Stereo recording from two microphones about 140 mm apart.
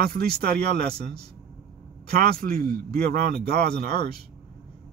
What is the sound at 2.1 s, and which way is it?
Speech, 90° right.